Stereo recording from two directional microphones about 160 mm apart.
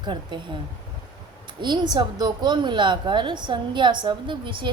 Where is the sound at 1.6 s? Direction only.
30° right (ahead or behind).